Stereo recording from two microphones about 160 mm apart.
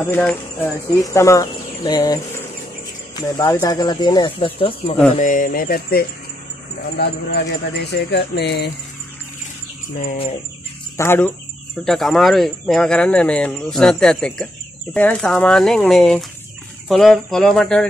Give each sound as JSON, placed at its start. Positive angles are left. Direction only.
{"t": 0.0, "sound": "speech", "side_deg": 10}
{"t": 5.1, "sound": "speech", "side_deg": 55}
{"t": 7.0, "sound": "speech", "side_deg": 85}
{"t": 11.0, "sound": "speech", "side_deg": 10}
{"t": 11.8, "sound": "speech", "side_deg": 0}